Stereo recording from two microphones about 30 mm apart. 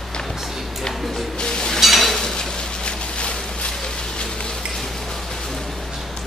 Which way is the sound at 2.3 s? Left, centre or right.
Left.